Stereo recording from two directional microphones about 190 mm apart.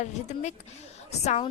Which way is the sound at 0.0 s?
35° left (ahead or behind).